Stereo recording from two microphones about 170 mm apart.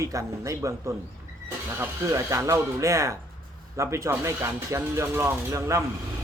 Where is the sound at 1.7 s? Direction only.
15° right (ahead or behind).